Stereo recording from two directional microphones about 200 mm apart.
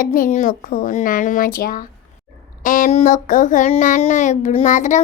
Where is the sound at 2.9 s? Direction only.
40° left (ahead or behind).